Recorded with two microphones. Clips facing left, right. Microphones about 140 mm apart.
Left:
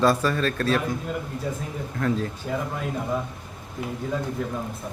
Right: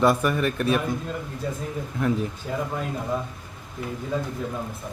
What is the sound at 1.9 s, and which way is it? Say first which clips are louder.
Speech: even; 15° right (ahead or behind).